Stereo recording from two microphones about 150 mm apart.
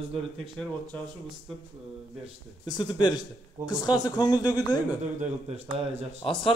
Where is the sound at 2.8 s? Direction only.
30° left (ahead or behind).